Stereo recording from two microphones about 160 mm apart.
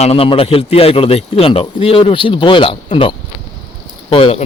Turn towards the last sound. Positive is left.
turn(degrees=35)  # may be behind; listen again after turning